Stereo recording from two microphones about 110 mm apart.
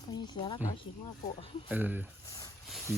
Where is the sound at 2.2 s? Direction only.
30° left (ahead or behind).